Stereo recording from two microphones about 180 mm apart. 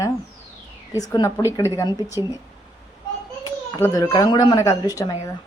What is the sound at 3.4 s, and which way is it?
Speech, 20° left (ahead or behind).